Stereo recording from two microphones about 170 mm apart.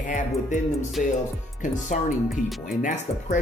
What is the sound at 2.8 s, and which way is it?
Speech, 45° left (ahead or behind).